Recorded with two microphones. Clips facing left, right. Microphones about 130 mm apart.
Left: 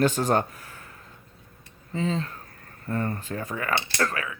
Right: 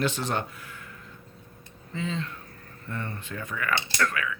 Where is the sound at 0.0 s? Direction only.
45° left (ahead or behind).